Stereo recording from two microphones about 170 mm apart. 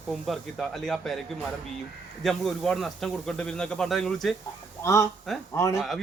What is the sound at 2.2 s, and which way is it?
Speech, centre (ahead or behind).